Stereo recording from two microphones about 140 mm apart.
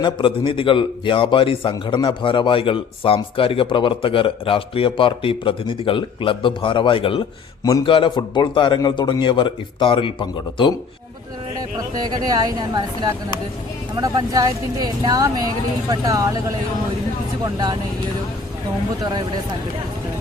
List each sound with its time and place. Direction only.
0.0 s a man's voice: 35° left (ahead or behind)
7.6 s a man's voice: 25° left (ahead or behind)
7.9 s a man's voice: 35° left (ahead or behind)
12.0 s speech: 30° right (ahead or behind)
17.4 s speech: 30° right (ahead or behind)